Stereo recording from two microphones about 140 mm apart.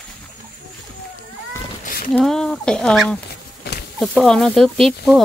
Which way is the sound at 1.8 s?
75° left (ahead or behind).